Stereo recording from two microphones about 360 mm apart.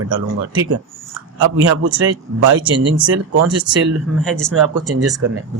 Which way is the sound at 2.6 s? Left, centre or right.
Centre.